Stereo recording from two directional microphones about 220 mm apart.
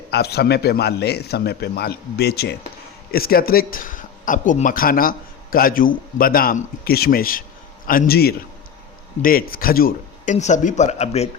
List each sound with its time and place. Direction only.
0.1 s a man's voice: 45° left (ahead or behind); by 11.3 s 30° left (ahead or behind)